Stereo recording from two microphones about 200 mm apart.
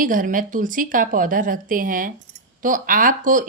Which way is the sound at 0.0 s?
40° right (ahead or behind).